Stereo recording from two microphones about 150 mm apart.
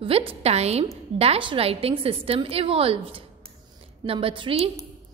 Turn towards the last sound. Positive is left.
turn(degrees=-35)  # may be behind; listen again after turning